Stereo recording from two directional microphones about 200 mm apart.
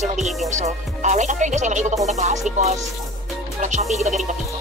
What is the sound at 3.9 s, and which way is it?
Music, 35° right (ahead or behind).